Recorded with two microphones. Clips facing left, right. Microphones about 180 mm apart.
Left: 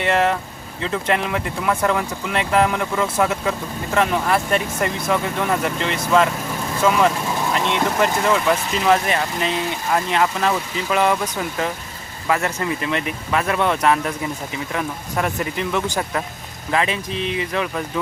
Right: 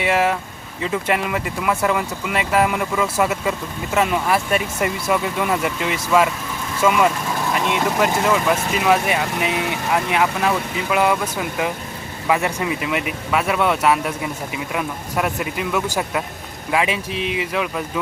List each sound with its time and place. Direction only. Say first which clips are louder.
0.0 s speech: even; 10° right (ahead or behind)